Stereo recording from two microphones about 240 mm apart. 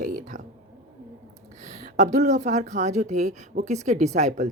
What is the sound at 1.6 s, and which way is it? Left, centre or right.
A woman's voice, right.